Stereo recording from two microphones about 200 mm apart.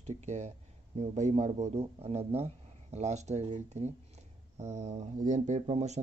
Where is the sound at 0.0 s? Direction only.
35° right (ahead or behind).